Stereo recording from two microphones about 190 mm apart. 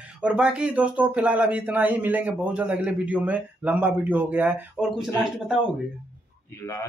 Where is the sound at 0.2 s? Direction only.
5° right (ahead or behind).